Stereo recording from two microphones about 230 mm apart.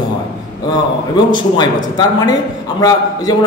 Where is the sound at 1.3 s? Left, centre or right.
Centre.